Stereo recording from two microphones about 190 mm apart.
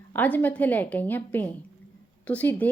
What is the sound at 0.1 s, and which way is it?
A woman's voice, 10° left (ahead or behind).